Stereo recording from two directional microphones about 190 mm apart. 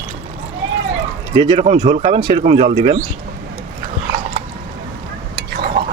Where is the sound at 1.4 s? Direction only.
25° right (ahead or behind).